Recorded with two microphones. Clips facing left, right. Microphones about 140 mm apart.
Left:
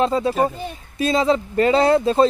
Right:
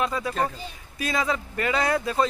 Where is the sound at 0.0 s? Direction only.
30° left (ahead or behind).